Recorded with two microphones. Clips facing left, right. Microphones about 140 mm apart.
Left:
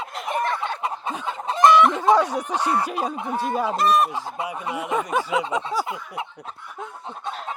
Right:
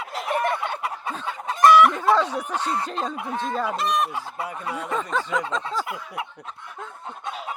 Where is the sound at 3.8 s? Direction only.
40° left (ahead or behind).